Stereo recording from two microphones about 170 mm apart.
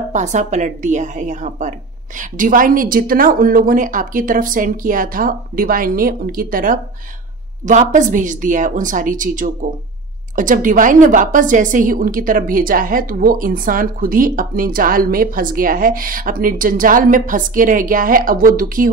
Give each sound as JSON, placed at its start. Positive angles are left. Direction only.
{"t": 0.1, "sound": "a woman's voice", "side_deg": -45}